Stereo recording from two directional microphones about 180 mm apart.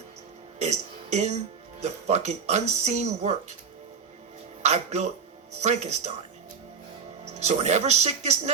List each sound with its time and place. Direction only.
0.6 s a sound: 40° right (ahead or behind)
1.8 s speech: 40° right (ahead or behind)
4.6 s speech: 40° right (ahead or behind)
7.3 s speech: 40° right (ahead or behind)